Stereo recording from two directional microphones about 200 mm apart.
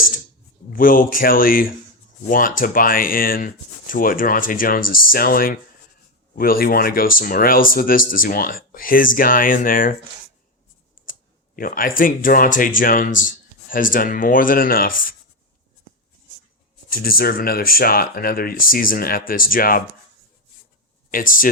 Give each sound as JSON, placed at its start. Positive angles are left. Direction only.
{"t": 0.7, "sound": "speech", "side_deg": 45}
{"t": 11.0, "sound": "speech", "side_deg": 45}
{"t": 16.9, "sound": "speech", "side_deg": 45}
{"t": 21.1, "sound": "speech", "side_deg": 45}